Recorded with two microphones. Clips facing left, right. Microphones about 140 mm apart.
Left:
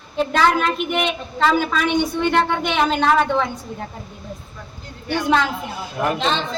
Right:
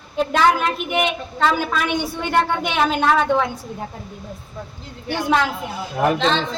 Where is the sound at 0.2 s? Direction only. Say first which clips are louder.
Even; 5° right (ahead or behind).